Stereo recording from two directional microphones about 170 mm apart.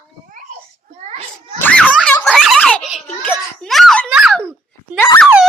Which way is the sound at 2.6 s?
5° left (ahead or behind).